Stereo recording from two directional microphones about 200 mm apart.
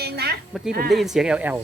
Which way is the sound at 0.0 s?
50° right (ahead or behind).